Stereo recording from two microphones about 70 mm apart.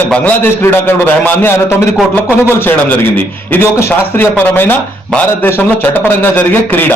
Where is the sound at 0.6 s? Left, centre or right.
Left.